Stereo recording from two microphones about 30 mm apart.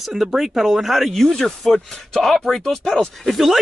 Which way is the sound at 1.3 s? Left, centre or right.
Centre.